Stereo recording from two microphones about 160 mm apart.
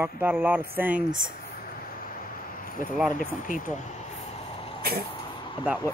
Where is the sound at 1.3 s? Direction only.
65° left (ahead or behind).